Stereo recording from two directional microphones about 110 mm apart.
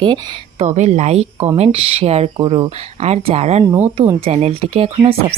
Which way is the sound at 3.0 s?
75° right (ahead or behind).